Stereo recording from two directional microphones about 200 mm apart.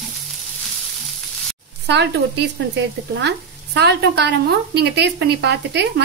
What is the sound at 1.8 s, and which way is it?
Speech, 60° right (ahead or behind).